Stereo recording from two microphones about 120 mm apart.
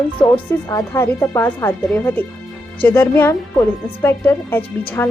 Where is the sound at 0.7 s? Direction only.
25° left (ahead or behind).